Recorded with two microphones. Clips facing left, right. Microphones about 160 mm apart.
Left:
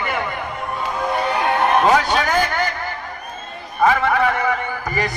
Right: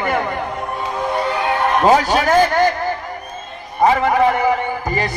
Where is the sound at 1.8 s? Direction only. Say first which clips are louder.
Right 3 dB; 35° right (ahead or behind).